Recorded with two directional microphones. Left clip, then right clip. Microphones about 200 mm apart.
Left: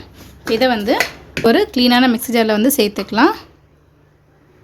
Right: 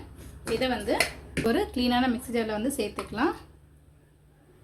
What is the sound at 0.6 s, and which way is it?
A woman's voice, 50° left (ahead or behind).